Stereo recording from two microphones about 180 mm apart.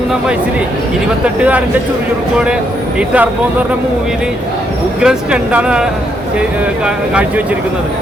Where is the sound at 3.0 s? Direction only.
10° right (ahead or behind).